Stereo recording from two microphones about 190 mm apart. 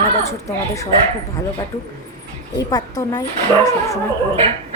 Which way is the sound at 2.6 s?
20° left (ahead or behind).